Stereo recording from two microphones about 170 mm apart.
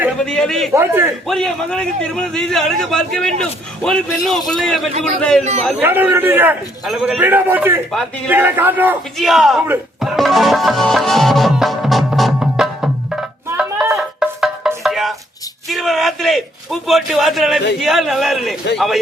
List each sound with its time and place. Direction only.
0.2 s a man's voice: 5° left (ahead or behind)
0.7 s a man's voice: 15° right (ahead or behind)
1.3 s a man's voice: 5° left (ahead or behind)
5.4 s a man's voice: 40° right (ahead or behind)
5.8 s a man's voice: 10° right (ahead or behind)
6.8 s a man's voice: centre (ahead or behind)
7.2 s a man's voice: 10° right (ahead or behind)
9.1 s a man's voice: centre (ahead or behind)
10.0 s music: centre (ahead or behind)
14.8 s chopping: centre (ahead or behind)
15.7 s a sound: centre (ahead or behind)
17.7 s a man's voice: centre (ahead or behind)